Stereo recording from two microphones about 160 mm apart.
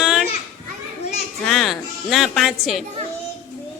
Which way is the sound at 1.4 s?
Centre (ahead or behind).